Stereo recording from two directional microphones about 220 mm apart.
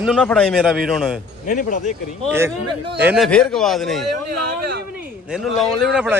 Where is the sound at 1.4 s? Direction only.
35° left (ahead or behind).